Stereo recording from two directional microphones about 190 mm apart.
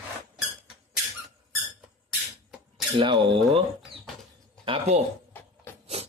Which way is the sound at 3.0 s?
25° right (ahead or behind).